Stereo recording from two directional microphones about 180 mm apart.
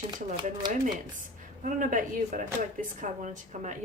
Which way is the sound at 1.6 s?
45° right (ahead or behind).